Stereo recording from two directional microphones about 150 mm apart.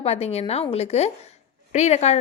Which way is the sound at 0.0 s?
45° left (ahead or behind).